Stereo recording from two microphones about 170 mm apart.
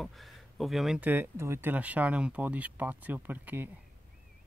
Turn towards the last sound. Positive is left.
turn(degrees=-10)  # may be behind; listen again after turning